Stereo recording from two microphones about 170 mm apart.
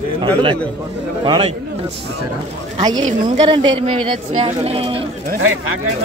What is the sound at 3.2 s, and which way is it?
Speech, 30° right (ahead or behind).